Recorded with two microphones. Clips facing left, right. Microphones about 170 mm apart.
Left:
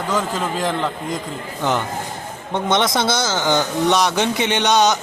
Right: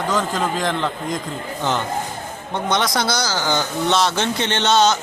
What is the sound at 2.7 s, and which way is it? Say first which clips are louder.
A man's voice: left 2 dB; 25° left (ahead or behind).